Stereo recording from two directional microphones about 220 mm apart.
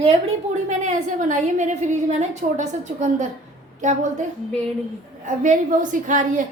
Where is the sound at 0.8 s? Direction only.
35° right (ahead or behind).